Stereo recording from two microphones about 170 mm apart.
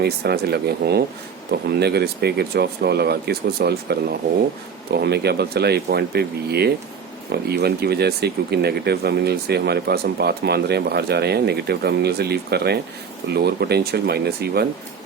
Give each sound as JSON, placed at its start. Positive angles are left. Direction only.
{"t": 0.0, "sound": "speech", "side_deg": -70}